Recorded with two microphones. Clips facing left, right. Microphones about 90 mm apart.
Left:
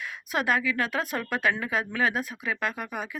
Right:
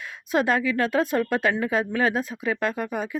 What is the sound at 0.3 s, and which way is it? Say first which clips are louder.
A woman's voice: right 4 dB; 25° right (ahead or behind).